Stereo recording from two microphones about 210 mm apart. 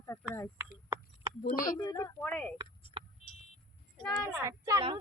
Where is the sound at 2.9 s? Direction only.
25° right (ahead or behind).